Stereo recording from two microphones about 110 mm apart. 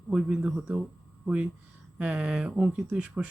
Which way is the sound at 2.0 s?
10° right (ahead or behind).